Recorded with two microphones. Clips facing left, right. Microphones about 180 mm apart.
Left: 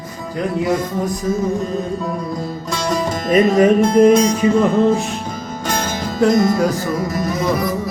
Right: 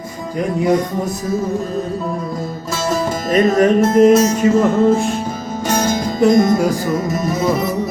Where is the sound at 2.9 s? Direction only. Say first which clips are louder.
Left 1 dB; centre (ahead or behind).